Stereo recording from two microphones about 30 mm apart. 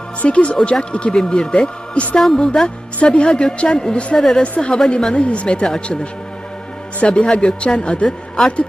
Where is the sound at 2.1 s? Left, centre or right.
Centre.